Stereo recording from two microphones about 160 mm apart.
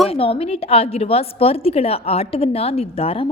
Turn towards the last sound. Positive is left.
turn(degrees=40)  # may be behind; listen again after turning